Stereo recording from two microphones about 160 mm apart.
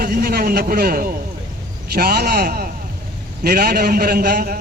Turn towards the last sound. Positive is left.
turn(degrees=-70)  # may be behind; listen again after turning